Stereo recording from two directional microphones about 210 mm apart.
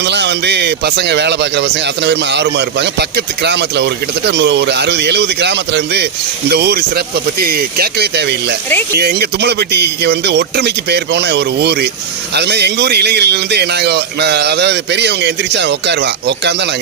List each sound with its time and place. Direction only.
0.0 s a man's voice: 55° right (ahead or behind)